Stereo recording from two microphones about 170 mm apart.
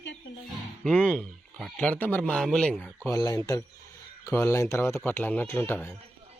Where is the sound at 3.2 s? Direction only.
20° left (ahead or behind).